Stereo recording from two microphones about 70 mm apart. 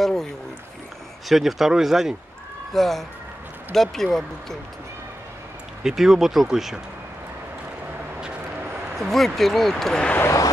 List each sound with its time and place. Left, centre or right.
0.0 s speech: centre
1.3 s speech: centre
5.9 s speech: centre
8.9 s speech: centre
10.2 s vehicle: left